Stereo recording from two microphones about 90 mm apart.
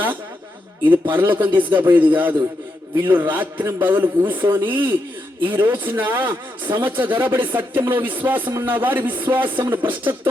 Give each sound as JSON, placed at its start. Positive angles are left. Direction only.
{"t": 1.1, "sound": "speech", "side_deg": -20}